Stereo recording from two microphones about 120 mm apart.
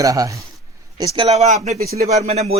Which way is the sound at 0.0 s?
30° right (ahead or behind).